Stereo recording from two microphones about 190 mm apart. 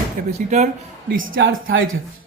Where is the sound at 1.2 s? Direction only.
80° right.